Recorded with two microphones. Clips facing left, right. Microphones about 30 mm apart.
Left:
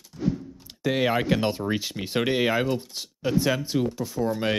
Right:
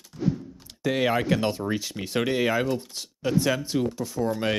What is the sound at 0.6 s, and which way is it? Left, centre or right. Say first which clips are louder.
Speech: even; centre.